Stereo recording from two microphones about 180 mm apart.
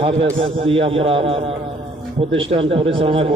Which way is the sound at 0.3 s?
30° right (ahead or behind).